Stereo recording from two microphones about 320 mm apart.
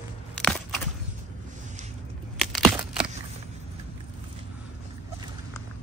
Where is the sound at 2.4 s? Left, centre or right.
Centre.